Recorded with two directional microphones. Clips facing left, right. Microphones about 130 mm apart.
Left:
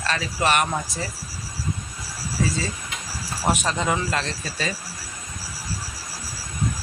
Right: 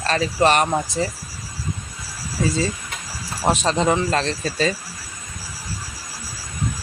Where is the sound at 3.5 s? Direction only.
30° right (ahead or behind).